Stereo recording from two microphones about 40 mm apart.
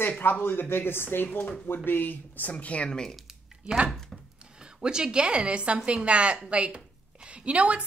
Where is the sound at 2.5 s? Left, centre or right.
Left.